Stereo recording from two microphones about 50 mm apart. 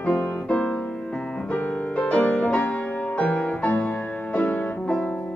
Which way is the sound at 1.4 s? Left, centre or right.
Left.